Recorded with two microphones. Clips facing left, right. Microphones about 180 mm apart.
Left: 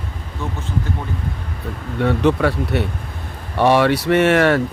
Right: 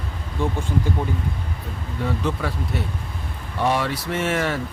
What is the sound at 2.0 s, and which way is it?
Speech, 70° left (ahead or behind).